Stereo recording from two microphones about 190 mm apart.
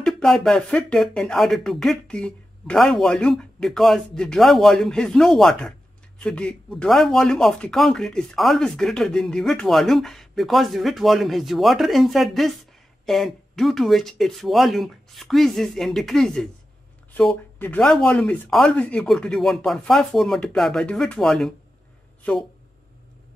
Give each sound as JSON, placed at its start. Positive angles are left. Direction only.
{"t": 0.0, "sound": "speech", "side_deg": 0}